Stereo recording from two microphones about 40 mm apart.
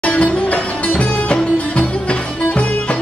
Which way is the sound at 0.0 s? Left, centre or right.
Left.